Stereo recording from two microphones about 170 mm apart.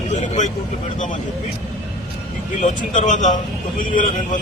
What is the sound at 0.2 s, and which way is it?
Speech, 45° left (ahead or behind).